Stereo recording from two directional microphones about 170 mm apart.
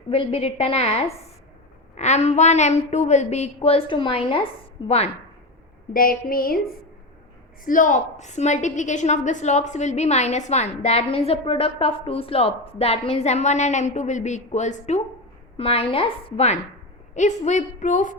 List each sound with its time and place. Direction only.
0.1 s a woman's voice: 35° left (ahead or behind)
5.9 s a sound: 55° left (ahead or behind)
7.6 s a woman's voice: 50° left (ahead or behind)